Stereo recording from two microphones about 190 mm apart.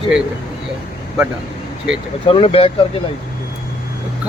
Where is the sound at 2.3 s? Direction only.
30° left (ahead or behind).